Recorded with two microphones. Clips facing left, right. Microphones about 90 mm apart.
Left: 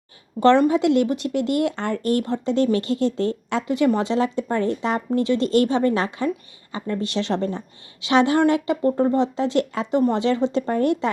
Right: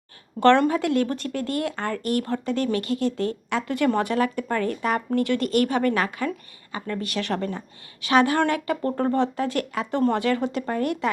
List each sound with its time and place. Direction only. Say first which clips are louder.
0.3 s speech: left 2 dB; 10° left (ahead or behind); by 11.1 s 30° left (ahead or behind)